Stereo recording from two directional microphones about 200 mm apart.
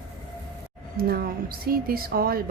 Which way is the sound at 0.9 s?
50° right (ahead or behind).